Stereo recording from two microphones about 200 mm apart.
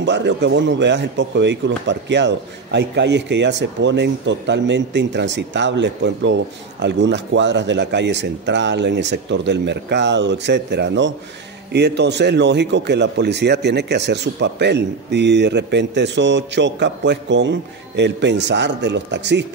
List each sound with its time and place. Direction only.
0.0 s a man's voice: 60° right (ahead or behind)